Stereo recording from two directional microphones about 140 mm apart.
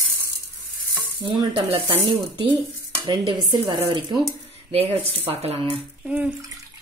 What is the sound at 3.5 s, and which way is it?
Speech, 30° right (ahead or behind).